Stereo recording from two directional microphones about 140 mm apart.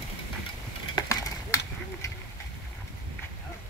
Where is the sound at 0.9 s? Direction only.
25° left (ahead or behind).